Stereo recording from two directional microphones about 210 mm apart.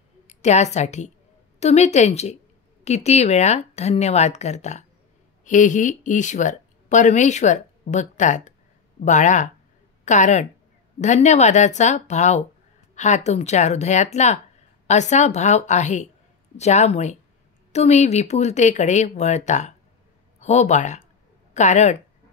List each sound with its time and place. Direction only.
0.3 s a woman's voice: 35° left (ahead or behind)